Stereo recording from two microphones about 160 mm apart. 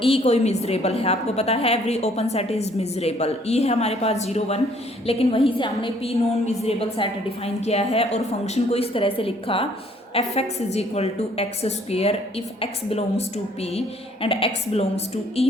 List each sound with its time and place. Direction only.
0.0 s a woman's voice: 40° left (ahead or behind)